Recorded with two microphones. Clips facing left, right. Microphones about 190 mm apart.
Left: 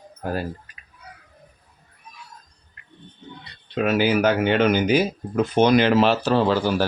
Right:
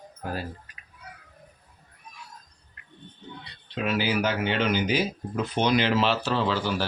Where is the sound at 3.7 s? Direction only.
50° left (ahead or behind).